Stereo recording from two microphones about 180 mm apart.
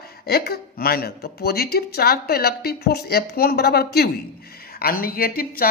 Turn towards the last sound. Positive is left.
turn(degrees=55)  # may be behind; listen again after turning